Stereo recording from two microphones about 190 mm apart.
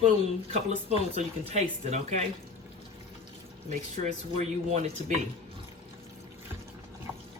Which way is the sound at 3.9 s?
35° right (ahead or behind).